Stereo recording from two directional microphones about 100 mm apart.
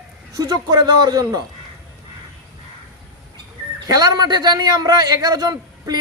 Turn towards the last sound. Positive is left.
turn(degrees=-40)  # may be behind; listen again after turning